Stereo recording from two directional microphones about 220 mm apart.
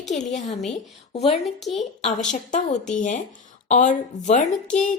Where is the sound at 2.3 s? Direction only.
35° left (ahead or behind).